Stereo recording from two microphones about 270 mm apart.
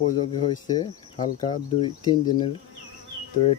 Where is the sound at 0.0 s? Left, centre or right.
Centre.